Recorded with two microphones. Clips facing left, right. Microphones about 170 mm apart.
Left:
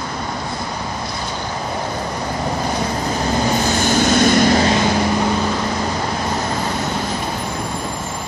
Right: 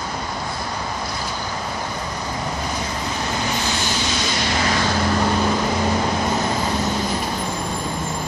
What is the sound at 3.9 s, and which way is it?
Vehicle, 50° left (ahead or behind).